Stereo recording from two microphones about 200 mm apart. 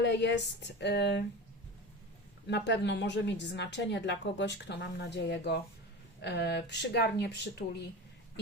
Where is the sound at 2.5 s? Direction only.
60° left (ahead or behind).